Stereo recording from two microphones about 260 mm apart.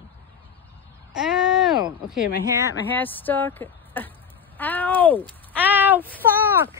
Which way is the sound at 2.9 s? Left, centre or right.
Centre.